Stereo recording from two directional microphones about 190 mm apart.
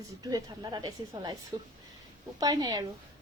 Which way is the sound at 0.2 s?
20° right (ahead or behind).